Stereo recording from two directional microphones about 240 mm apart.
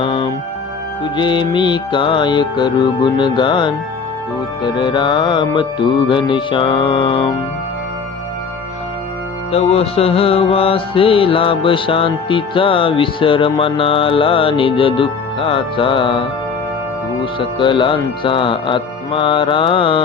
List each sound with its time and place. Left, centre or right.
0.0 s music: centre
9.5 s music: left
17.4 s music: left